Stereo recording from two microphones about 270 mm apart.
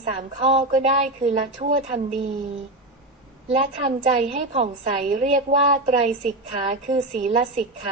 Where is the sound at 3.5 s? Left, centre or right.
Right.